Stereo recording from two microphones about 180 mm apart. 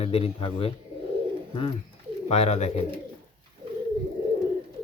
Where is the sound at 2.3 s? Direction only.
35° left (ahead or behind).